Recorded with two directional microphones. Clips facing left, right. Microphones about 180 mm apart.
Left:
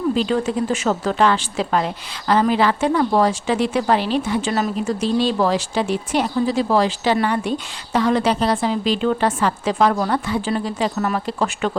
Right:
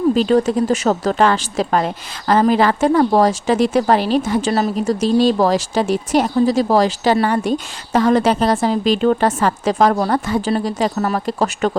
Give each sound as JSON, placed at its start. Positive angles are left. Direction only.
{"t": 0.2, "sound": "a woman's voice", "side_deg": -45}